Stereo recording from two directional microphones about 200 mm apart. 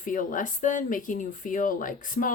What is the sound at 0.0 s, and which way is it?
Speech, 40° left (ahead or behind).